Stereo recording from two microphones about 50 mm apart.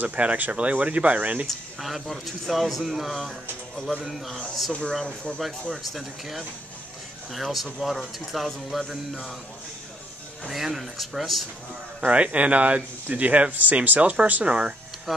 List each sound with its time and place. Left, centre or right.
0.0 s speech: right
1.5 s speech: centre
5.0 s speech: left
5.7 s speech: centre
7.4 s speech: centre
10.5 s speech: centre
12.1 s speech: right
15.1 s speech: centre